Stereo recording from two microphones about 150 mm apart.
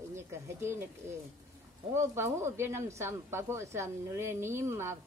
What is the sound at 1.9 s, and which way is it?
Speech, 15° right (ahead or behind).